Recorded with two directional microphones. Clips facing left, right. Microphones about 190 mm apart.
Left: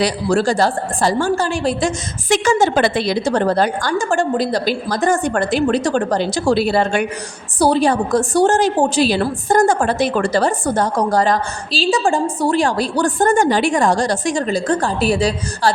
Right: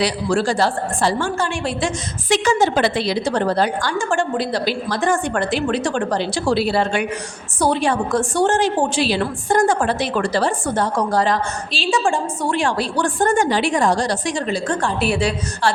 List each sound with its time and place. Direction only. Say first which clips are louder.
0.0 s a woman's voice: left 3 dB; 45° left (ahead or behind)
7.6 s a woman's voice: left 4 dB; 35° left (ahead or behind)